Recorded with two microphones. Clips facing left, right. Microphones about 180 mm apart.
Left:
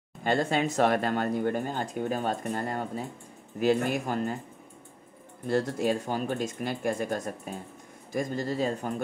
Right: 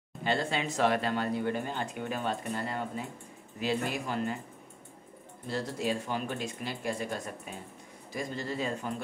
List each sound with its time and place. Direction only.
0.2 s speech: 45° left (ahead or behind)
5.5 s speech: 50° left (ahead or behind)